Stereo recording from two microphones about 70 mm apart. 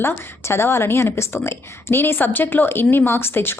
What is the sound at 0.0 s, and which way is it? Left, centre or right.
A woman's voice, left.